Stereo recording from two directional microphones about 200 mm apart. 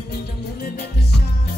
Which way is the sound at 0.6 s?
55° left (ahead or behind).